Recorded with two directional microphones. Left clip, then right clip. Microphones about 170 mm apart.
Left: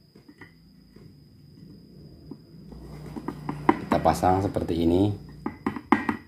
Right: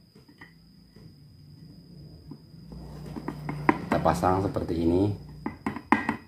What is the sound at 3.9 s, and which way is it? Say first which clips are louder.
Speech: left 3 dB; 15° left (ahead or behind).